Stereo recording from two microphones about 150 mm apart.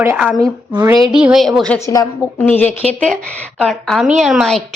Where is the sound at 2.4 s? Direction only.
10° left (ahead or behind).